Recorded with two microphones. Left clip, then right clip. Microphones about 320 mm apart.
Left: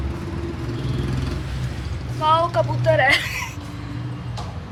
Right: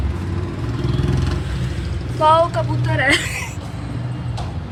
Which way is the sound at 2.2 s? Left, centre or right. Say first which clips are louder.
Right 4 dB; centre.